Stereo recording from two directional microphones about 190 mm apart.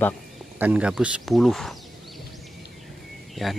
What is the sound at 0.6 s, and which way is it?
Speech, 5° right (ahead or behind).